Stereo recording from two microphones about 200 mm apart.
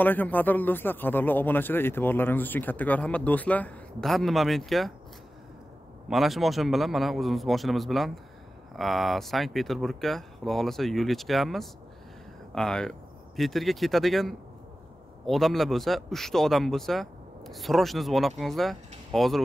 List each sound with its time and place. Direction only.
0.0 s a man's voice: 10° left (ahead or behind)
6.0 s a man's voice: centre (ahead or behind)